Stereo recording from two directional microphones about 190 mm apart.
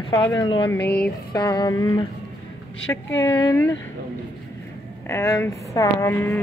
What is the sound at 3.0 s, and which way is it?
Speech, 15° left (ahead or behind).